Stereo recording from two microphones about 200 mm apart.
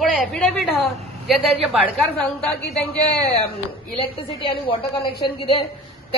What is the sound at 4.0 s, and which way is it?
Speech, 25° left (ahead or behind).